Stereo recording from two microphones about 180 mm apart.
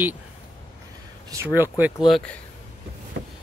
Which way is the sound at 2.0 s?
5° left (ahead or behind).